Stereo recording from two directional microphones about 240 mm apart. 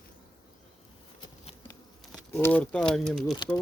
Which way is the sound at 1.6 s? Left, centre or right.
Centre.